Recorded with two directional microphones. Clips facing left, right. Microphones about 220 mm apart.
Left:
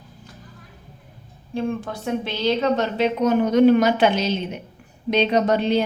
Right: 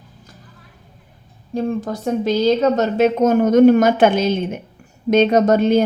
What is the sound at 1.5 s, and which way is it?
A woman's voice, 40° right (ahead or behind).